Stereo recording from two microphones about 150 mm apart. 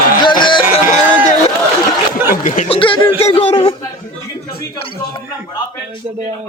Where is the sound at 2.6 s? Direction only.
35° left (ahead or behind).